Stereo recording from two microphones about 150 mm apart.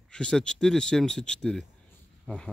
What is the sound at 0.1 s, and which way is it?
Speech, 5° left (ahead or behind).